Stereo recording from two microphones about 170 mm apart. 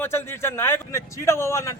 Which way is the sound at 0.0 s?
15° left (ahead or behind).